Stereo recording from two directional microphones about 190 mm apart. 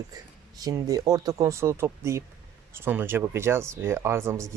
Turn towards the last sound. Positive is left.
turn(degrees=-15)  # may be behind; listen again after turning